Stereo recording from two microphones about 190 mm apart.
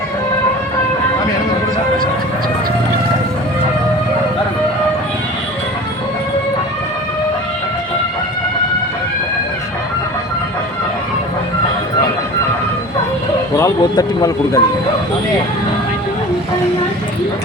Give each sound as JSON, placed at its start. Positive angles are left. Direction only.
{"t": 13.6, "sound": "speech", "side_deg": 20}